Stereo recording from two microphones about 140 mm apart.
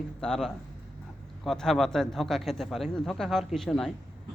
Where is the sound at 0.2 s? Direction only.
5° left (ahead or behind).